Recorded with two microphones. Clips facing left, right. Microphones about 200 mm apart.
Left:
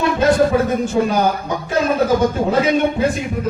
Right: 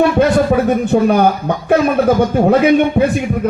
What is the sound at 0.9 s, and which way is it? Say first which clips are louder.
Speech: right 5 dB; 60° right (ahead or behind).